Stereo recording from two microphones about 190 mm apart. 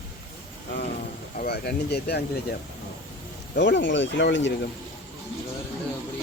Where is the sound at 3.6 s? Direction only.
70° left (ahead or behind).